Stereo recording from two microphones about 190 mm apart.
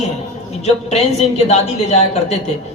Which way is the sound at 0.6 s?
35° left (ahead or behind).